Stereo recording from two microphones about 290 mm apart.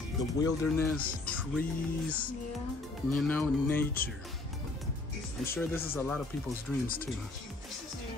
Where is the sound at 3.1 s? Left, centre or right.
Centre.